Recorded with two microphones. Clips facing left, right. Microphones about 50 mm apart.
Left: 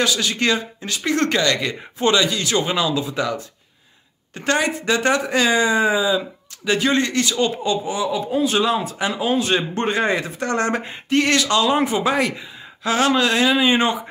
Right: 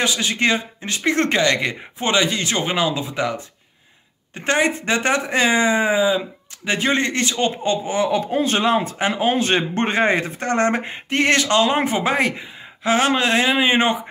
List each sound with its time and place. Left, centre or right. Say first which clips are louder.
0.0 s speech: even; right